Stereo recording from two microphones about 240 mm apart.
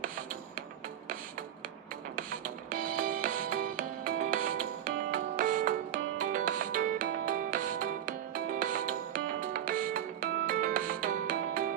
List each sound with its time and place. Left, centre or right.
2.8 s music: right